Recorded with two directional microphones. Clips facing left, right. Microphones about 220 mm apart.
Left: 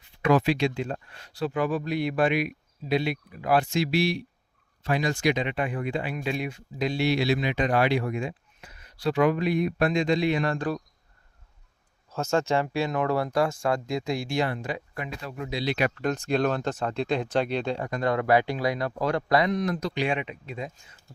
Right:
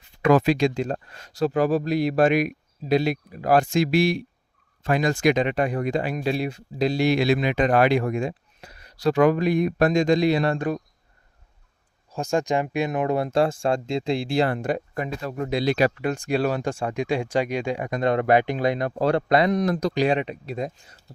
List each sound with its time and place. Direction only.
0.2 s speech: 45° right (ahead or behind); by 10.8 s 20° right (ahead or behind)
12.1 s speech: 15° right (ahead or behind); by 14.5 s 30° right (ahead or behind)
14.5 s speech: 50° right (ahead or behind)
16.0 s speech: 10° right (ahead or behind); by 19.5 s 30° right (ahead or behind)
19.5 s speech: 40° right (ahead or behind)